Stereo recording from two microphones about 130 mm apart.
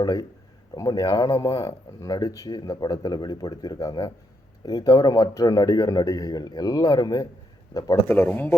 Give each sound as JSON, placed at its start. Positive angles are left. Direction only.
{"t": 0.0, "sound": "speech", "side_deg": 30}
{"t": 4.9, "sound": "speech", "side_deg": 40}
{"t": 5.1, "sound": "speech", "side_deg": 25}